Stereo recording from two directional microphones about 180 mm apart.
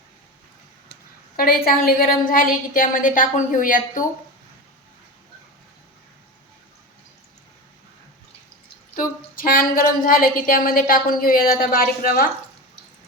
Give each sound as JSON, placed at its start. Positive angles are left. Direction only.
{"t": 1.4, "sound": "speech", "side_deg": 55}
{"t": 9.0, "sound": "speech", "side_deg": 50}